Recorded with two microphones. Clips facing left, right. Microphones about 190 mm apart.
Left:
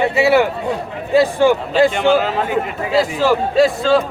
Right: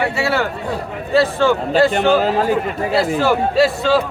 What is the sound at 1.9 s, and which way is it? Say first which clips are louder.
Speech: even; 40° right (ahead or behind).